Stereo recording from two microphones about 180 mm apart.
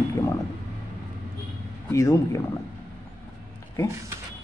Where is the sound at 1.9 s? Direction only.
15° left (ahead or behind).